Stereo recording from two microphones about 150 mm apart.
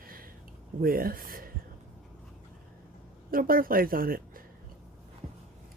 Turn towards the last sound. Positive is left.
turn(degrees=-75)  # may be behind; listen again after turning